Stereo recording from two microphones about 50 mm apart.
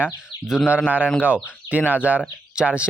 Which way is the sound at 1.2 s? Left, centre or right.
Right.